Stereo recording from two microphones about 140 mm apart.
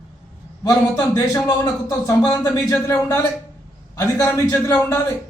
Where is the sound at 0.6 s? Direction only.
25° left (ahead or behind).